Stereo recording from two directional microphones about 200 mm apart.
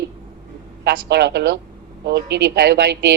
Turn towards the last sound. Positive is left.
turn(degrees=-55)  # may be behind; listen again after turning